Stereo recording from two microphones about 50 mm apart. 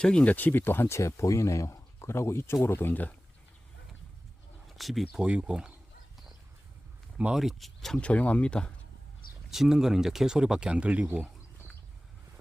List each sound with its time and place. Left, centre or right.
0.0 s speech: centre
0.3 s speech: left
0.9 s speech: left
2.6 s speech: left
4.8 s speech: centre
5.1 s speech: centre
7.3 s speech: centre
7.9 s speech: left
9.5 s speech: centre; by 11.3 s right